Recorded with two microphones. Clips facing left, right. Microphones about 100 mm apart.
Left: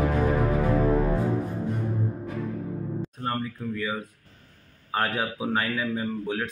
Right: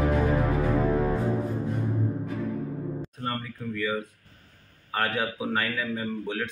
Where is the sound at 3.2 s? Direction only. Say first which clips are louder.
Left 3 dB; 25° left (ahead or behind).